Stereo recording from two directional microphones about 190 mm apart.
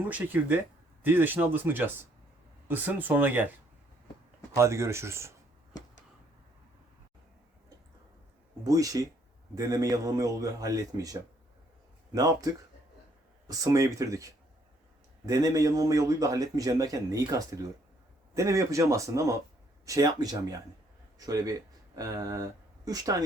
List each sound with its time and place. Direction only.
0.1 s a man's voice: 10° right (ahead or behind)
4.5 s a man's voice: 15° right (ahead or behind)
8.6 s a man's voice: 20° right (ahead or behind)
13.5 s a man's voice: 15° right (ahead or behind)
15.3 s a man's voice: 20° right (ahead or behind)